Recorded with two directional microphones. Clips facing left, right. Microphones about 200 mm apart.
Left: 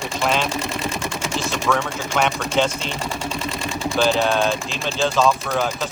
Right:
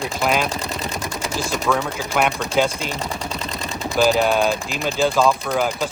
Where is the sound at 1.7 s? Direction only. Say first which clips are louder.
Right 1 dB; 5° right (ahead or behind).